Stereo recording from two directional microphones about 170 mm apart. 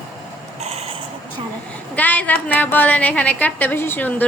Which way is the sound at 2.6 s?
10° left (ahead or behind).